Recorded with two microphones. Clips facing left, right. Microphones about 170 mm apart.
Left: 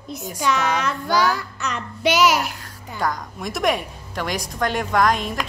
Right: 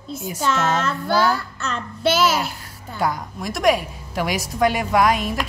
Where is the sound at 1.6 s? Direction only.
15° left (ahead or behind).